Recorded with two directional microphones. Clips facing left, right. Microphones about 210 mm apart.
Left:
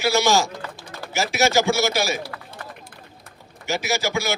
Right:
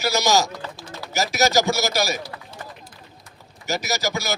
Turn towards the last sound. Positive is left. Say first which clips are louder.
# left 2 dB
turn(degrees=-40)  # may be behind; listen again after turning